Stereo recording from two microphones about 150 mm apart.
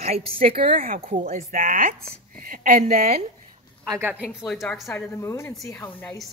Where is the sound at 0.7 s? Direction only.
65° right (ahead or behind).